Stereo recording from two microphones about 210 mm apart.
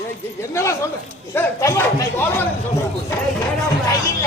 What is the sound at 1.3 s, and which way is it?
A man's voice, 10° left (ahead or behind).